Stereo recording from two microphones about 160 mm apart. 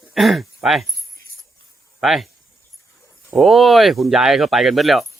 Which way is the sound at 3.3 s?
Centre (ahead or behind).